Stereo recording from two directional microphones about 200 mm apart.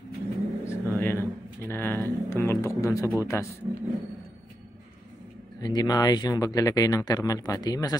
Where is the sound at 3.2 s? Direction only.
15° left (ahead or behind).